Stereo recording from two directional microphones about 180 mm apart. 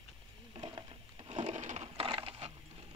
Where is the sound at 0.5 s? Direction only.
30° right (ahead or behind).